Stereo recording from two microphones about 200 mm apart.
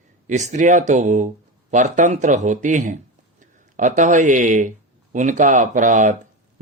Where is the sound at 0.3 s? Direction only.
35° right (ahead or behind).